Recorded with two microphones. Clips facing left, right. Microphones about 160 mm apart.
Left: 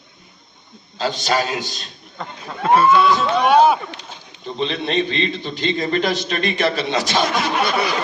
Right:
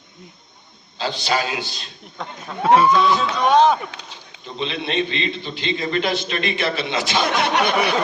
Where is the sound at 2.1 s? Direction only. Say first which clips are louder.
Right 1 dB; 10° right (ahead or behind).